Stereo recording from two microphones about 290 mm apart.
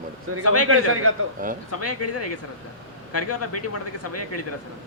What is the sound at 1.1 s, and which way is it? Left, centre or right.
Speech, right.